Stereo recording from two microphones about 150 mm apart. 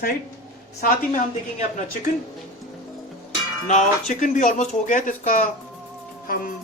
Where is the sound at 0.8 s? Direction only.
75° left (ahead or behind).